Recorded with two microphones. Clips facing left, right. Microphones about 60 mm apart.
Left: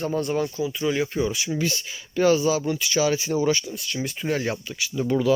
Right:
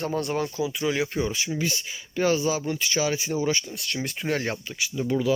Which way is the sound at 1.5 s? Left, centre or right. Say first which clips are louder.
Left 2 dB; right.